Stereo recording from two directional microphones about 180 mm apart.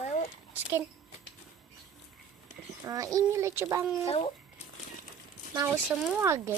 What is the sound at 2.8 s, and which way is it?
A child's voice, 20° right (ahead or behind).